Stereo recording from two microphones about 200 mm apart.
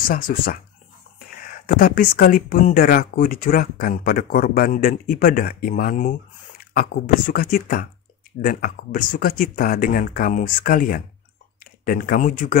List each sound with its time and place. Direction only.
0.0 s speech: 45° left (ahead or behind)